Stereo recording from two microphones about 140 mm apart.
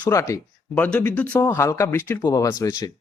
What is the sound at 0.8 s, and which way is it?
Speech, 10° left (ahead or behind).